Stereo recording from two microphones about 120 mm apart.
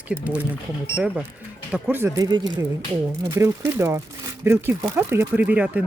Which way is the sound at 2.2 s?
35° right (ahead or behind).